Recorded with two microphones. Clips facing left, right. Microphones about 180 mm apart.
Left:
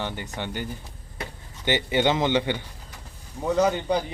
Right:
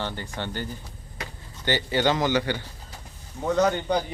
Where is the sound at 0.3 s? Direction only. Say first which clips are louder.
Even; 15° left (ahead or behind).